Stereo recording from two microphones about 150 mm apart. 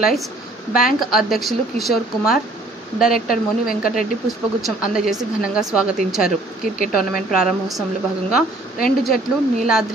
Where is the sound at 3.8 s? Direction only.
Centre (ahead or behind).